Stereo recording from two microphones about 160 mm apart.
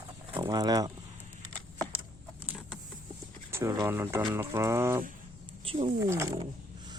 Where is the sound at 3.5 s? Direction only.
15° right (ahead or behind).